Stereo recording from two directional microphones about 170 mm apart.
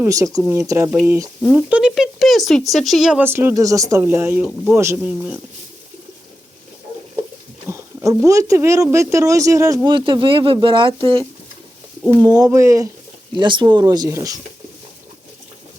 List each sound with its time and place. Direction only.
0.0 s speech: 20° right (ahead or behind)
1.4 s speech: 5° right (ahead or behind)
3.2 s speech: 15° right (ahead or behind)
7.7 s speech: 20° right (ahead or behind)